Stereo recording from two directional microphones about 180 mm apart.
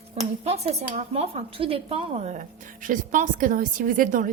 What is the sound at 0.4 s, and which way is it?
Speech, 35° right (ahead or behind).